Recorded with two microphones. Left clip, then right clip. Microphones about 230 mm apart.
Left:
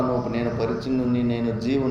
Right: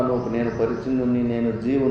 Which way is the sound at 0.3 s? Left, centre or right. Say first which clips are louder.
Right 2 dB; left.